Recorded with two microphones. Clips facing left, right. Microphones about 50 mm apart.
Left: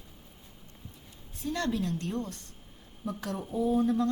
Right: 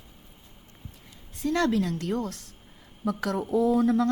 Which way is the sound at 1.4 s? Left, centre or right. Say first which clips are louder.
Right 7 dB; right.